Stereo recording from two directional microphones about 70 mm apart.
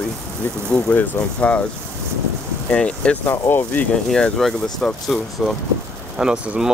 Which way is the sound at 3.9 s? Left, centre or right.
Centre.